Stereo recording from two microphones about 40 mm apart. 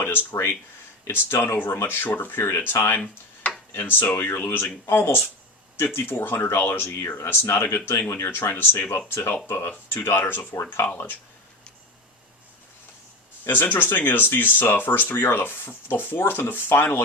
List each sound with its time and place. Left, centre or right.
0.0 s speech: left
1.1 s speech: left
4.3 s speech: left
6.6 s speech: left
7.3 s speech: left
9.0 s speech: left
10.2 s speech: left
13.4 s speech: left